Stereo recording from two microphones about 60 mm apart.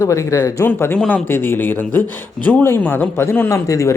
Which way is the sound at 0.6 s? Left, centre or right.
Left.